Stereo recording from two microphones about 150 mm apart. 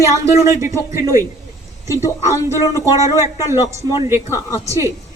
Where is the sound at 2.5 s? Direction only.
20° right (ahead or behind).